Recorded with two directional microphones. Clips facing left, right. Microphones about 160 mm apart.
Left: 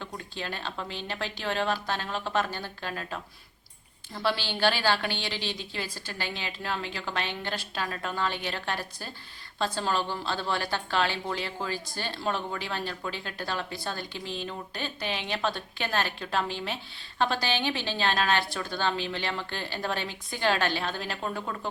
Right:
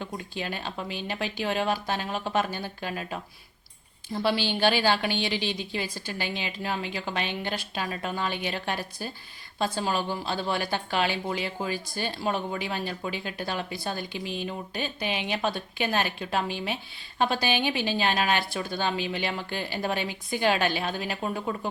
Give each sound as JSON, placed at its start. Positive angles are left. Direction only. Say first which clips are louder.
{"t": 0.0, "sound": "a woman's voice", "louder": "right 3 dB", "side_deg": -15}